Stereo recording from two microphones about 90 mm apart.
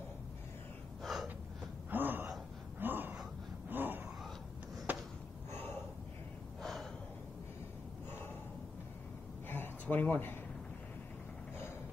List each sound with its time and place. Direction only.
1.0 s gasp: centre (ahead or behind)
1.9 s gasp: 20° right (ahead or behind)
3.7 s a sound: 20° right (ahead or behind)
5.5 s gasp: 25° left (ahead or behind)
6.6 s gasp: centre (ahead or behind)
9.5 s a sound: 20° left (ahead or behind)